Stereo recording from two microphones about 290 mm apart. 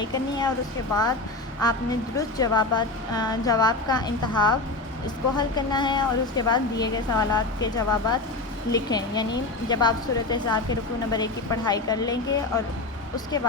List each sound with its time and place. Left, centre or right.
0.1 s a woman's voice: centre
1.6 s a woman's voice: centre
13.1 s a woman's voice: centre